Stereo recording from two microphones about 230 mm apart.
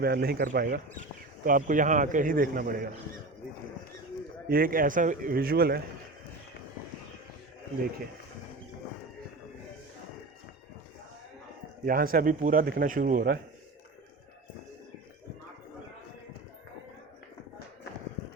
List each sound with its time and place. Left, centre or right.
0.0 s speech: right
4.4 s speech: right
11.9 s speech: right